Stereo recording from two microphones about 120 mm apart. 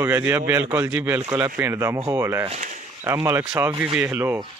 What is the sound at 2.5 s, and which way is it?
Speech, 90° right.